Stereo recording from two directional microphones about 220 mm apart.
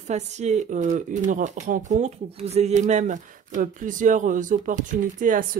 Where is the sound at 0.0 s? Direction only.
30° right (ahead or behind).